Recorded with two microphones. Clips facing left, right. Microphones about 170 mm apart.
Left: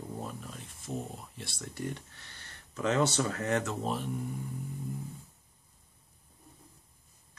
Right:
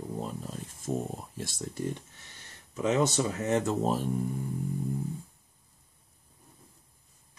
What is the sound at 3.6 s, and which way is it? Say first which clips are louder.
Speech: right 6 dB; 40° right (ahead or behind).